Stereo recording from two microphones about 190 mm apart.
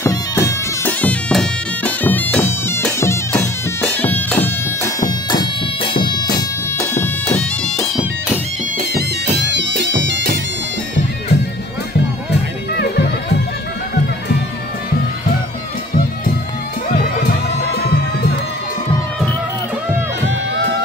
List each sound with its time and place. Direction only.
0.0 s bagpipes: 15° left (ahead or behind)
5.9 s bagpipes: 25° left (ahead or behind)
7.0 s bagpipes: 5° left (ahead or behind)
9.5 s bagpipes: 70° right (ahead or behind)
12.7 s music: 60° left (ahead or behind)
20.2 s music: 70° right (ahead or behind)